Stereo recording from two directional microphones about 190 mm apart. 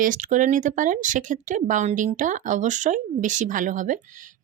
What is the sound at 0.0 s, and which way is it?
Speech, 40° right (ahead or behind).